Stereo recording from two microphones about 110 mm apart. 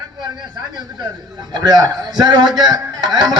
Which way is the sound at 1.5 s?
40° right (ahead or behind).